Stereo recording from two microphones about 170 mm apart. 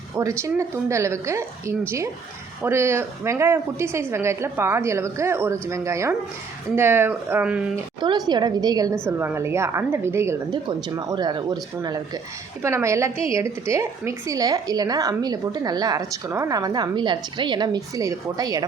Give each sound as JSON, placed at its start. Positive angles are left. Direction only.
{"t": 0.2, "sound": "speech", "side_deg": -20}
{"t": 8.3, "sound": "a woman's voice", "side_deg": -25}